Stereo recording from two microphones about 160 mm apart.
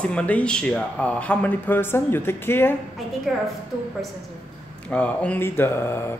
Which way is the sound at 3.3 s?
Centre (ahead or behind).